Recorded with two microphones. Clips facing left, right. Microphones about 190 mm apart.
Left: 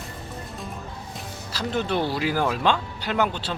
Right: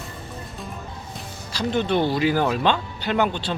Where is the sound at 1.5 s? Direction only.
5° left (ahead or behind).